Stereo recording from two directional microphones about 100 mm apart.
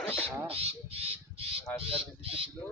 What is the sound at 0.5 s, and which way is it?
Speech, 85° right.